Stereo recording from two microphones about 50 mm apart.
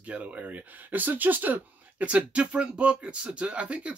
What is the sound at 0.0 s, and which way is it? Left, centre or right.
Speech, right.